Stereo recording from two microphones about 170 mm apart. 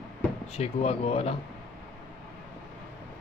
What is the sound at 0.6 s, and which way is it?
Speech, 40° left (ahead or behind).